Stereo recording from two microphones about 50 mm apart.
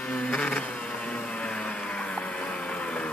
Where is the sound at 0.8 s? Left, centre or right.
Left.